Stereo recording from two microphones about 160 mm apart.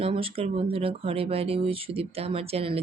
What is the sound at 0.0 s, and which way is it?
Speech, 35° right (ahead or behind).